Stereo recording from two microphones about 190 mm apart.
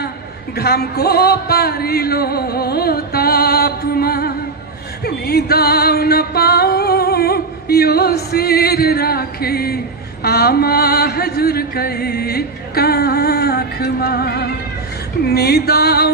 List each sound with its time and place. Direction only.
0.6 s music: 55° left (ahead or behind)